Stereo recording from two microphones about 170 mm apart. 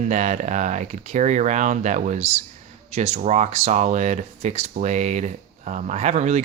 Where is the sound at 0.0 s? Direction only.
45° right (ahead or behind).